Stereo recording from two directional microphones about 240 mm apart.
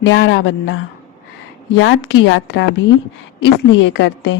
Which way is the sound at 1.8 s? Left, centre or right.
Left.